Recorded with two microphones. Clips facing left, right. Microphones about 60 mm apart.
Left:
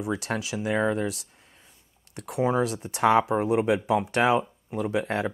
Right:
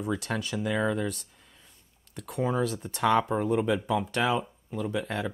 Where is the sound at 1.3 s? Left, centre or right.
Left.